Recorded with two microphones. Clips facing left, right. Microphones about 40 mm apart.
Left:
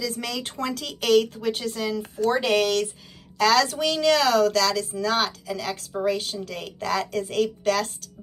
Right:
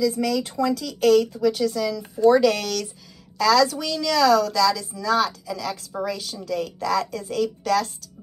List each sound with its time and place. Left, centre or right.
0.0 s speech: left